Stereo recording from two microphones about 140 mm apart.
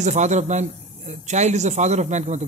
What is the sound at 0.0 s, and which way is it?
Speech, 55° right (ahead or behind).